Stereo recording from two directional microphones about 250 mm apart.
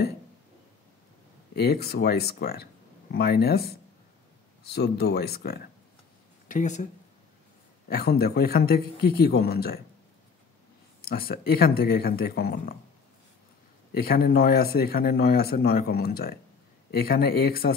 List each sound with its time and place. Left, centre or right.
1.5 s speech: left
7.9 s speech: left
11.0 s speech: left
13.9 s speech: left